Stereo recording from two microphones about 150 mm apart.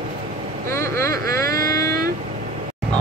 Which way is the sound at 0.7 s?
20° left (ahead or behind).